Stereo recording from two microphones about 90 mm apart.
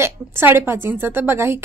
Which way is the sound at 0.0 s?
25° right (ahead or behind).